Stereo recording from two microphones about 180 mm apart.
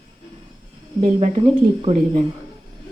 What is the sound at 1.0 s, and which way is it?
Speech, 35° right (ahead or behind).